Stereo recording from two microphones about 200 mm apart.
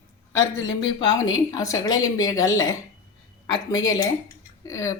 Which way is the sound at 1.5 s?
15° left (ahead or behind).